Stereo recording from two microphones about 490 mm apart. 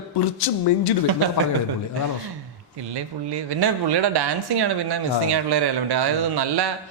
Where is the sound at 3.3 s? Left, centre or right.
Right.